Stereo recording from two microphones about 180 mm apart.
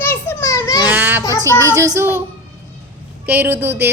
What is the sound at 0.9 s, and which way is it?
A woman's voice, 10° right (ahead or behind).